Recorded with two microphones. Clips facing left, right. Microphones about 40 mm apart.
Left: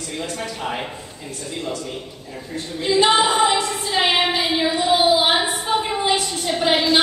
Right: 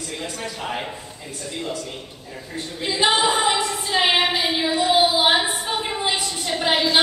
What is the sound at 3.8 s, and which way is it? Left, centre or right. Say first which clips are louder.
Female singing: right 2 dB; centre.